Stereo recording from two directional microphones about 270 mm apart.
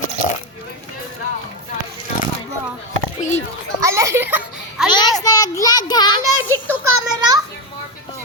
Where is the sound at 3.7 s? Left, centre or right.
Centre.